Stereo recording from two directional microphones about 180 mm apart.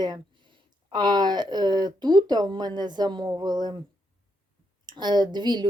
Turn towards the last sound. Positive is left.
turn(degrees=-25)  # may be behind; listen again after turning